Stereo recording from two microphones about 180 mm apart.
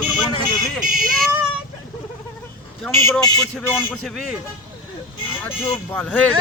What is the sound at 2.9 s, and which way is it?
Speech, 15° left (ahead or behind).